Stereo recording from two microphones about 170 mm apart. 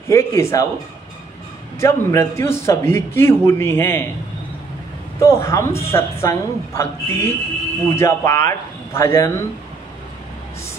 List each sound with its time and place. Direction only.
0.1 s a man's voice: 15° left (ahead or behind)
1.8 s a man's voice: 15° left (ahead or behind)
5.2 s a man's voice: 15° left (ahead or behind)